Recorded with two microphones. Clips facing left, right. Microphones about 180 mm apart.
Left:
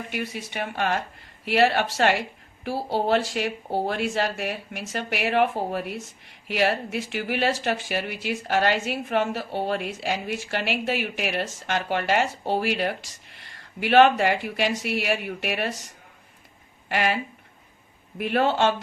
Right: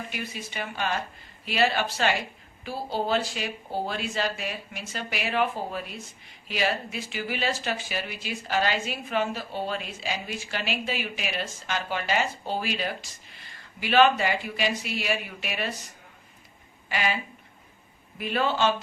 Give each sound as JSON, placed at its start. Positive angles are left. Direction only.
{"t": 0.1, "sound": "a woman's voice", "side_deg": 65}
{"t": 16.9, "sound": "a woman's voice", "side_deg": 65}
{"t": 18.2, "sound": "a woman's voice", "side_deg": 65}